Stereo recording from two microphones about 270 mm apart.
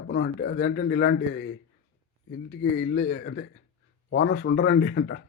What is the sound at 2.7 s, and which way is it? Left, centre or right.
A man's voice, left.